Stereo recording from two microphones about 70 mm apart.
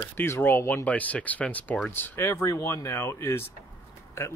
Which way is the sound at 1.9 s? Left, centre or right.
Left.